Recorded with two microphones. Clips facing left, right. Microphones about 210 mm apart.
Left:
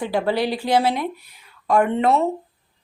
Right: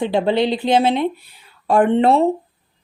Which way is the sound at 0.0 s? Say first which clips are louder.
Right 4 dB; 25° right (ahead or behind).